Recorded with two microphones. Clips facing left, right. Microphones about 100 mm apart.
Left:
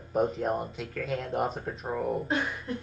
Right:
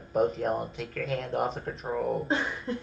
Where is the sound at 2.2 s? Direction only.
30° right (ahead or behind).